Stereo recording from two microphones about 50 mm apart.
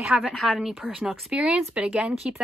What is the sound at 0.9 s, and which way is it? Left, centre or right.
Speech, centre.